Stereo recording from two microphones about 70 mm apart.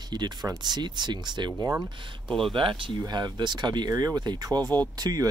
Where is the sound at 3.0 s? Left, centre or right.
Right.